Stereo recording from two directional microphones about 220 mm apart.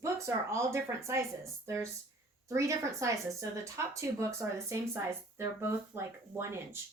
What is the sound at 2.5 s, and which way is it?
Speech, 15° right (ahead or behind).